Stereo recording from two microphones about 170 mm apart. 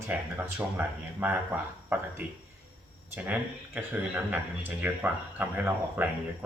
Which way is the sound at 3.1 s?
10° right (ahead or behind).